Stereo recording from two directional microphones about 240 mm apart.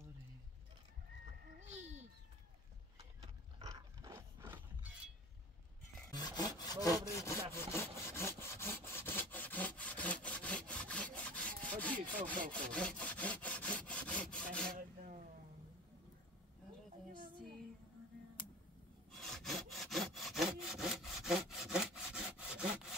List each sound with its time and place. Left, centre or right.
1.6 s a sound: right
3.5 s a sound: centre
6.1 s sawing: centre
11.2 s wood: centre
12.4 s sawing: right
12.7 s sawing: centre
14.7 s rub: right
19.1 s sawing: centre